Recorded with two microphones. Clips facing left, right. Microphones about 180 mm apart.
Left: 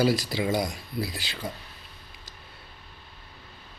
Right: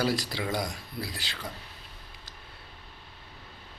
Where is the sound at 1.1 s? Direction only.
15° left (ahead or behind).